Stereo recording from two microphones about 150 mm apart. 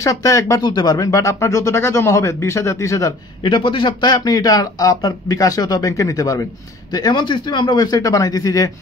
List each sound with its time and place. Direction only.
0.0 s speech: 20° left (ahead or behind)